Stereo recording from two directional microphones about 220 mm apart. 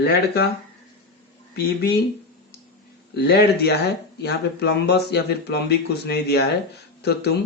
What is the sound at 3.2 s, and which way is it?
Speech, 45° left (ahead or behind).